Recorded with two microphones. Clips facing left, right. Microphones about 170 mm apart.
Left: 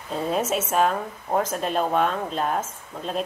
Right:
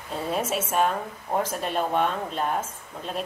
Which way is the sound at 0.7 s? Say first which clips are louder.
Left 2 dB; 40° left (ahead or behind).